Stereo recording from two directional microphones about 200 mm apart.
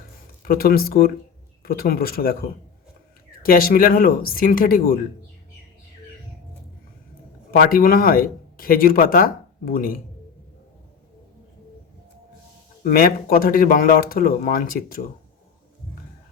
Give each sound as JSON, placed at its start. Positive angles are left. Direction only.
{"t": 0.4, "sound": "speech", "side_deg": 45}
{"t": 3.4, "sound": "speech", "side_deg": 45}
{"t": 7.5, "sound": "speech", "side_deg": 45}
{"t": 12.8, "sound": "speech", "side_deg": 45}